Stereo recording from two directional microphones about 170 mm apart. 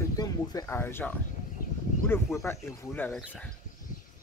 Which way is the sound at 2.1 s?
15° left (ahead or behind).